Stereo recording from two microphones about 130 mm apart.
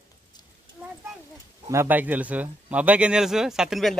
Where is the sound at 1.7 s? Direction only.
15° right (ahead or behind).